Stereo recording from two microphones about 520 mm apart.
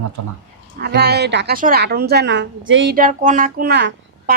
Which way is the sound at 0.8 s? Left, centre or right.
Centre.